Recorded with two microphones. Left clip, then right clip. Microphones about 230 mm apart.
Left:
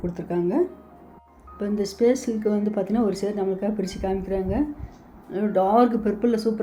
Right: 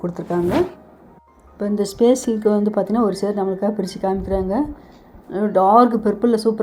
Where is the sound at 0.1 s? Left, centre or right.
Centre.